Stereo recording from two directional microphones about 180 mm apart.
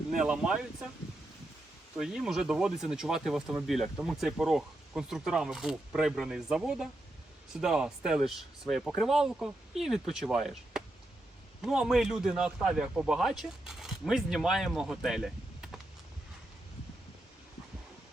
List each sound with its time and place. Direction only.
0.1 s speech: 5° right (ahead or behind)
2.0 s speech: 5° right (ahead or behind)